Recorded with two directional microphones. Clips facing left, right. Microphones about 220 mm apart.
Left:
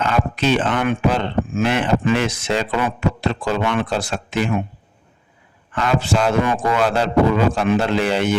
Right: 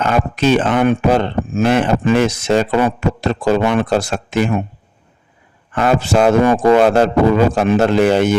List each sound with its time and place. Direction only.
0.0 s speech: 45° right (ahead or behind)
5.7 s speech: 50° right (ahead or behind)